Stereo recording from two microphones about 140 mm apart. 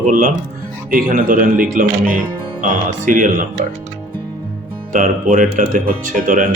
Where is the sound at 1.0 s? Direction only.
75° right (ahead or behind).